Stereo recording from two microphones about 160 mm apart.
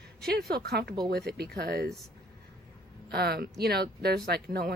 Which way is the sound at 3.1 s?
85° right.